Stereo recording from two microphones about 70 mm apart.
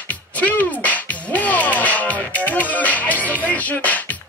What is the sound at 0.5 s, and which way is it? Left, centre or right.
Music, left.